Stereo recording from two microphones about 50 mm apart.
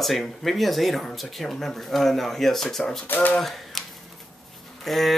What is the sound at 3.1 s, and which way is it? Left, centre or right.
Speech, left.